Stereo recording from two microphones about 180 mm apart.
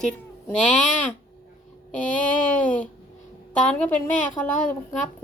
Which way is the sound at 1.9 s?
45° left (ahead or behind).